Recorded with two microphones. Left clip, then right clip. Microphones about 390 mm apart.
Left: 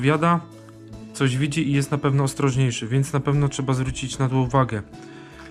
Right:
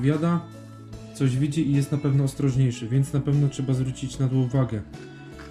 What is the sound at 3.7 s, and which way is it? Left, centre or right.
Speech, centre.